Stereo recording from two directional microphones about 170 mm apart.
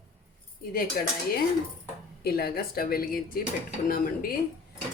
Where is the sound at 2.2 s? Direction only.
65° left (ahead or behind).